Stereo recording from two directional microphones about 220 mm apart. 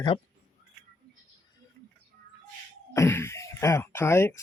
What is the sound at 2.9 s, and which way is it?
Speech, 10° left (ahead or behind).